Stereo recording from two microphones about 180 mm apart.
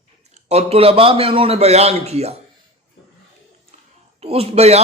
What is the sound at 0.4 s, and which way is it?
A man's voice, 35° right (ahead or behind).